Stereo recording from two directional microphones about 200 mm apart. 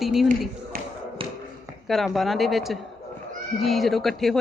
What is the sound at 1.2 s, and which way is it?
Tap, 25° right (ahead or behind).